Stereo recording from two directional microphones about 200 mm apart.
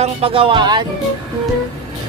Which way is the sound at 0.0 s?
30° right (ahead or behind).